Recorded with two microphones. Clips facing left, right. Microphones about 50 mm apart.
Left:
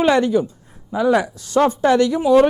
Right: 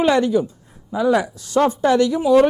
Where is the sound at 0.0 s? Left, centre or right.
Left.